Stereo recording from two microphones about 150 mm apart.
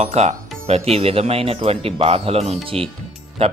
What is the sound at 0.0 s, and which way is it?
Speech, 45° right (ahead or behind).